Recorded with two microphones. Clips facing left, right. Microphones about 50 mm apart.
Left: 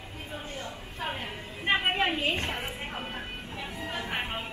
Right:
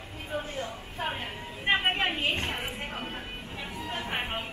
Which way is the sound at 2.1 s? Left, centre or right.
Right.